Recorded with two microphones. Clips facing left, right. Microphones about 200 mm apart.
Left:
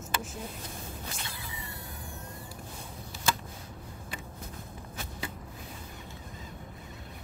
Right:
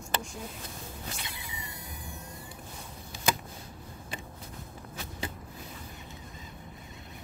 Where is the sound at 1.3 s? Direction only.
20° right (ahead or behind).